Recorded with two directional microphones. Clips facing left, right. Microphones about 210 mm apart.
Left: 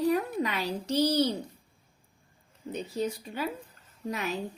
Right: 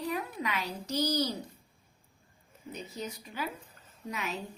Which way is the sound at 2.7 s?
30° left (ahead or behind).